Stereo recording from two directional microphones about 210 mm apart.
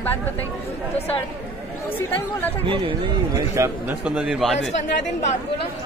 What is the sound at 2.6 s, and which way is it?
Speech, 25° right (ahead or behind).